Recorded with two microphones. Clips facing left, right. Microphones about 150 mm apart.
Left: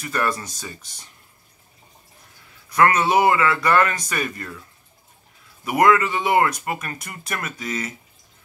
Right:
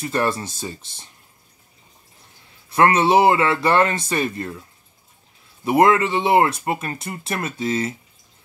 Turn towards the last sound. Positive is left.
turn(degrees=-30)  # may be behind; listen again after turning